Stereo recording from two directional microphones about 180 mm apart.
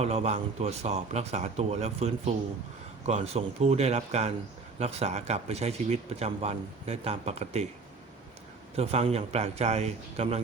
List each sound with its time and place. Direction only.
0.0 s speech: 35° right (ahead or behind)
8.7 s speech: 35° right (ahead or behind)